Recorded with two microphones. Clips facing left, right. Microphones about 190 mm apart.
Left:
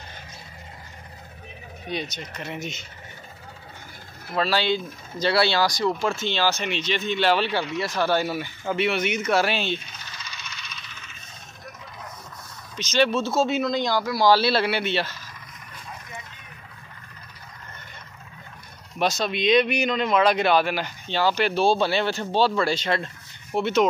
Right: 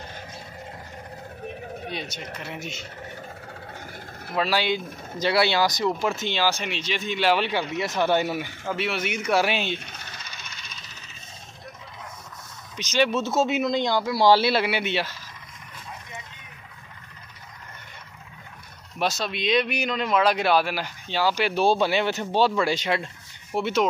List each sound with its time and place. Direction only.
1.9 s speech: 5° right (ahead or behind)
4.4 s speech: 10° right (ahead or behind)
8.6 s speech: centre (ahead or behind)
9.8 s a sound: 60° right (ahead or behind)
10.8 s coin: 40° right (ahead or behind)
12.7 s speech: 15° right (ahead or behind)
18.9 s speech: 5° right (ahead or behind)